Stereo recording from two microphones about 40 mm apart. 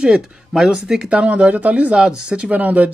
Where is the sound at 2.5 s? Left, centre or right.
Right.